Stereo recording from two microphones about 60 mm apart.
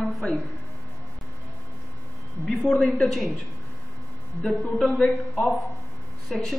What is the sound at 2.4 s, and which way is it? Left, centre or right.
Speech, centre.